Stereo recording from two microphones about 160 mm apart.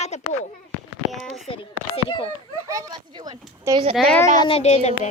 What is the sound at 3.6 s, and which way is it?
Speech, 25° right (ahead or behind).